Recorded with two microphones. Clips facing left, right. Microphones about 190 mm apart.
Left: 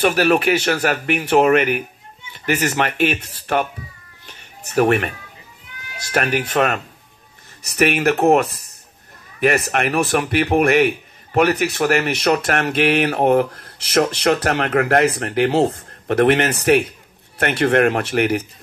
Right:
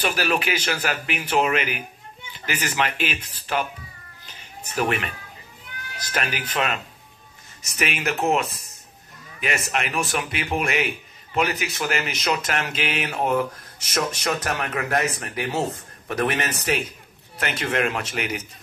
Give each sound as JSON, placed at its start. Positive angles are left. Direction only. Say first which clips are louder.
{"t": 0.0, "sound": "speech", "louder": "left 8 dB", "side_deg": 50}
{"t": 4.8, "sound": "speech", "louder": "left 7 dB", "side_deg": 50}
{"t": 6.1, "sound": "a man's voice", "louder": "left 8 dB", "side_deg": 55}